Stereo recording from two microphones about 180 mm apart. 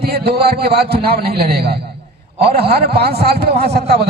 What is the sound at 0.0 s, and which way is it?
A man's voice, 60° right (ahead or behind).